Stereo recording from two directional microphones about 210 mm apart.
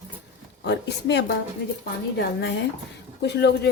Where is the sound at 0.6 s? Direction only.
55° left (ahead or behind).